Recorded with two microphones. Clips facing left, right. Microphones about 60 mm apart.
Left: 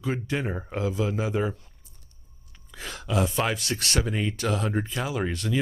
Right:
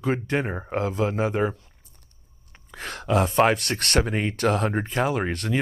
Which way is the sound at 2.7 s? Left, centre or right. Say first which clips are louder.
Right 4 dB; right.